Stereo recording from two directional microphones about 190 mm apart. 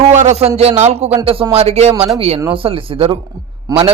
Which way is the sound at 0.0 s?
35° right (ahead or behind).